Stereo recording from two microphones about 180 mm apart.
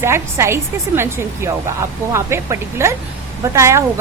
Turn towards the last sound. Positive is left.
turn(degrees=-15)  # may be behind; listen again after turning